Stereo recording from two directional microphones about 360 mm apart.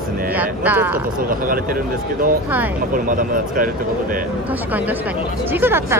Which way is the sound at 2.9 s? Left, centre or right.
Right.